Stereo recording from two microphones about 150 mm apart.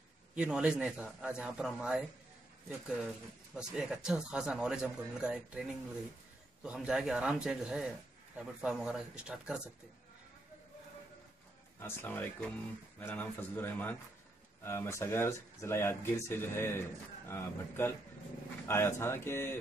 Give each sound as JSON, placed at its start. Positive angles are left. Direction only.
{"t": 0.3, "sound": "speech", "side_deg": -5}
{"t": 3.5, "sound": "speech", "side_deg": -5}
{"t": 6.6, "sound": "speech", "side_deg": -5}
{"t": 11.8, "sound": "speech", "side_deg": 15}